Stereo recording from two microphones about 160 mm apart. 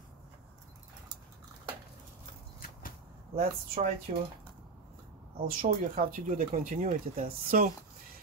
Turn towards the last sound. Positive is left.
turn(degrees=-60)  # may be behind; listen again after turning